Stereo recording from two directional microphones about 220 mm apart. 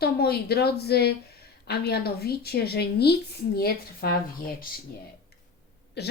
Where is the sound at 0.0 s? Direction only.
45° left (ahead or behind).